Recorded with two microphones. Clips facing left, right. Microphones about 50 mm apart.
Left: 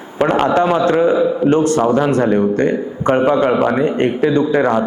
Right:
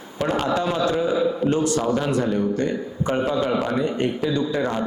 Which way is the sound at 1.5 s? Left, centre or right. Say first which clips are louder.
Left 8 dB; left.